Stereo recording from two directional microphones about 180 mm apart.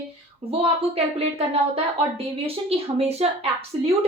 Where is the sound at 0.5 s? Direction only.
35° right (ahead or behind).